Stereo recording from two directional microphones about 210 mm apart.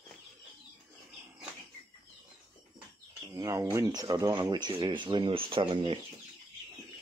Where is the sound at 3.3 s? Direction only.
15° right (ahead or behind).